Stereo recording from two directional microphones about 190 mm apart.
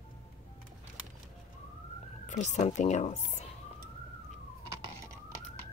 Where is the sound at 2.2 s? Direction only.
40° left (ahead or behind).